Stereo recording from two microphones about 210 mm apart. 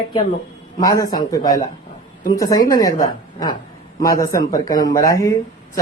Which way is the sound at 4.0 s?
15° left (ahead or behind).